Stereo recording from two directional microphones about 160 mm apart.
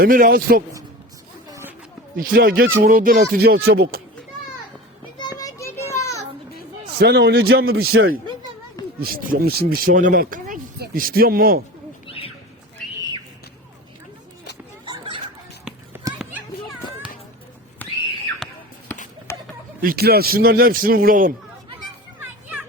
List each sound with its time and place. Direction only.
0.0 s speech: 65° right (ahead or behind)
1.5 s a sound: 15° right (ahead or behind)
2.1 s speech: 65° right (ahead or behind); by 4.0 s 80° right
5.4 s children playing: 20° left (ahead or behind)
7.0 s a man's voice: 85° right
9.0 s speech: 65° right (ahead or behind)
12.0 s owl: 35° left (ahead or behind)
14.8 s turkey: 30° right (ahead or behind)
17.8 s a sound: 10° left (ahead or behind)
19.8 s speech: 70° right (ahead or behind)